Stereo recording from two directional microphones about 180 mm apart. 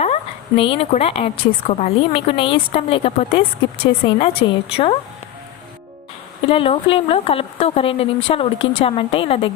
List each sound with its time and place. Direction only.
0.0 s a woman's voice: 35° left (ahead or behind)
6.5 s a woman's voice: 30° left (ahead or behind)